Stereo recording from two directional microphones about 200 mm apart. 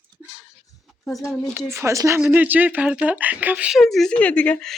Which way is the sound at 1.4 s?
10° right (ahead or behind).